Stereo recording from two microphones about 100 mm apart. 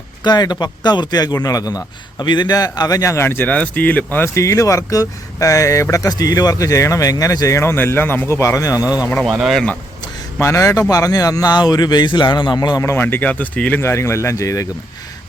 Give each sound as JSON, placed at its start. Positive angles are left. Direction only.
{"t": 0.3, "sound": "speech", "side_deg": 45}
{"t": 4.4, "sound": "speech", "side_deg": 30}
{"t": 8.8, "sound": "speech", "side_deg": -15}
{"t": 9.2, "sound": "speech", "side_deg": 0}
{"t": 10.4, "sound": "speech", "side_deg": 30}
{"t": 12.8, "sound": "speech", "side_deg": 25}
{"t": 13.8, "sound": "speech", "side_deg": 25}